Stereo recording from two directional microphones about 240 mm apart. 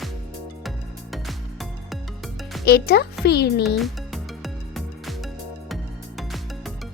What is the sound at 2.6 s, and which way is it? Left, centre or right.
A child's voice, left.